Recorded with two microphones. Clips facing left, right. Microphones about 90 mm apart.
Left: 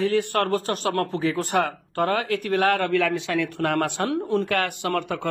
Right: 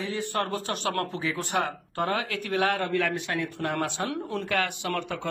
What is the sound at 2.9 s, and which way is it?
Speech, 85° left.